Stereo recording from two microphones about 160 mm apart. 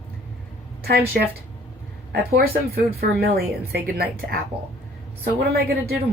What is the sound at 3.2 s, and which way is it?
A woman's voice, 80° right.